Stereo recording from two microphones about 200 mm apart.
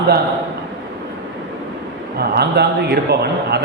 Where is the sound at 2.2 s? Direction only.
55° right (ahead or behind).